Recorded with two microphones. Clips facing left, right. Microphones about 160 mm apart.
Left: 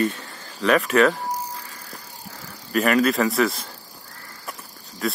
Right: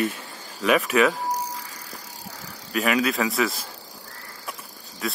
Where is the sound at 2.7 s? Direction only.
Centre (ahead or behind).